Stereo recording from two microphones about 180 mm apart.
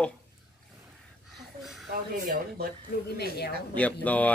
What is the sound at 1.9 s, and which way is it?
Speech, 55° right (ahead or behind).